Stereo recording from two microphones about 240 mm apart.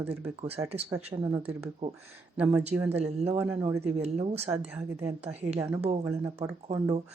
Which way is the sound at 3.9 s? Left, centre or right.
Right.